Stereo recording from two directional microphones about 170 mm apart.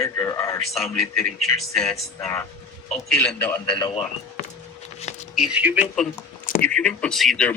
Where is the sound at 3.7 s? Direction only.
30° left (ahead or behind).